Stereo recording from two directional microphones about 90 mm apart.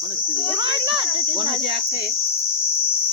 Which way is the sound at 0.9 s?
65° right (ahead or behind).